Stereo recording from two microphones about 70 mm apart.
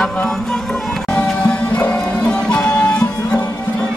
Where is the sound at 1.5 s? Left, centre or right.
Centre.